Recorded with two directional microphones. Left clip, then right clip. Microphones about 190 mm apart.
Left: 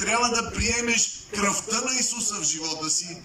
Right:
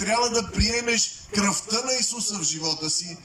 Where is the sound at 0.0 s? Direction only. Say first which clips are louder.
Even; 30° right (ahead or behind).